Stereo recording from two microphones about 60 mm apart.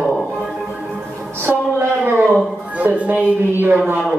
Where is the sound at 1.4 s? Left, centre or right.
Right.